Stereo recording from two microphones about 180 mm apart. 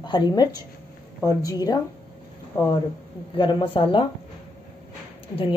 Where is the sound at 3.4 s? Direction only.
25° left (ahead or behind).